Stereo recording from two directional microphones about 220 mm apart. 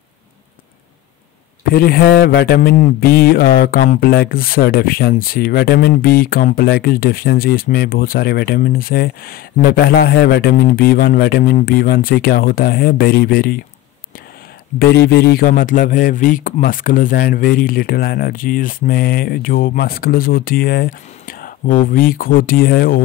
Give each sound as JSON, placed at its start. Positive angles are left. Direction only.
{"t": 1.7, "sound": "mantra", "side_deg": 45}
{"t": 14.8, "sound": "speech", "side_deg": 45}